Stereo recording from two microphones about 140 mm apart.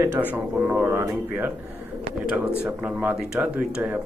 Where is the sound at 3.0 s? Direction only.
10° right (ahead or behind).